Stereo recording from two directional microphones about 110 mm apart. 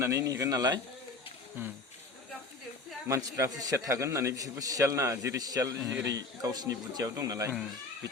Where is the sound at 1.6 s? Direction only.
20° right (ahead or behind).